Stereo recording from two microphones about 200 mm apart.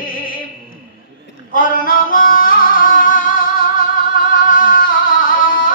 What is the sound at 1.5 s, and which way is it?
Music, 45° left (ahead or behind).